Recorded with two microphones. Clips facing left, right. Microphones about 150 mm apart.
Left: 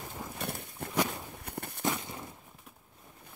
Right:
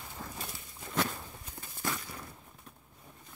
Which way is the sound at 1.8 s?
20° left (ahead or behind).